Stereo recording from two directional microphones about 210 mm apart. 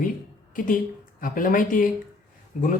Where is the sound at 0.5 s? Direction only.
40° left (ahead or behind).